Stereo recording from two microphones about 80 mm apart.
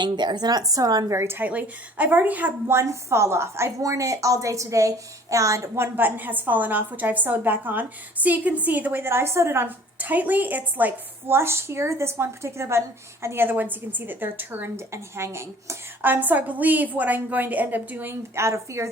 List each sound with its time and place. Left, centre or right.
0.0 s a woman's voice: right
1.0 s a woman's voice: right
1.4 s a woman's voice: centre
2.6 s a woman's voice: right
10.0 s a woman's voice: right
14.9 s a woman's voice: right
16.0 s a woman's voice: right